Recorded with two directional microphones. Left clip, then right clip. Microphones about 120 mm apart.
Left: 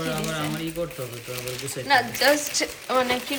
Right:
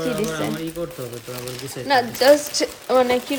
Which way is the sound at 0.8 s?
65° right (ahead or behind).